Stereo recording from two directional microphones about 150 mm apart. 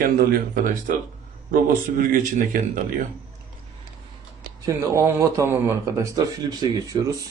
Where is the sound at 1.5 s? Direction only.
70° right (ahead or behind).